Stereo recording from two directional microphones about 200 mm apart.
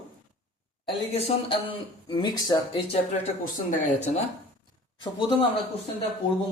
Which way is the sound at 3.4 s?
40° left (ahead or behind).